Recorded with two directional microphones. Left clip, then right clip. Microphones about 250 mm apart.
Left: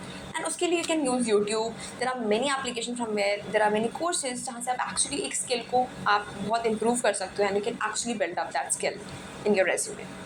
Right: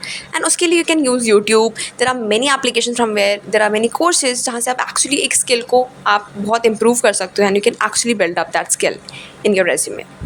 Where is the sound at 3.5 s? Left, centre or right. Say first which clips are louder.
Right 10 dB; right.